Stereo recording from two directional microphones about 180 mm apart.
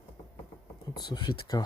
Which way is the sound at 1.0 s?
25° left (ahead or behind).